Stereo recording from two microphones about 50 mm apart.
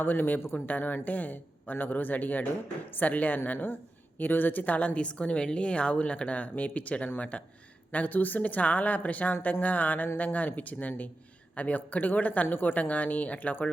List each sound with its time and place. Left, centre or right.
0.0 s a man's voice: left